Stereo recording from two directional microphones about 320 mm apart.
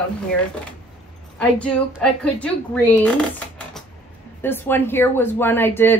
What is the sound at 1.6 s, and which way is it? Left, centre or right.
A woman's voice, centre.